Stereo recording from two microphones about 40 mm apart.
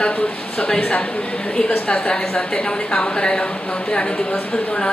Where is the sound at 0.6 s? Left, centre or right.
Left.